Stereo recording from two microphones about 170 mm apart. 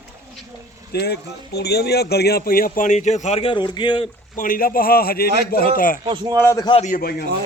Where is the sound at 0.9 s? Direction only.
70° left (ahead or behind); by 4.1 s 25° left (ahead or behind).